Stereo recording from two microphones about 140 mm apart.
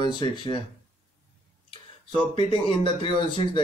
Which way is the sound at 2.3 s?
40° left (ahead or behind).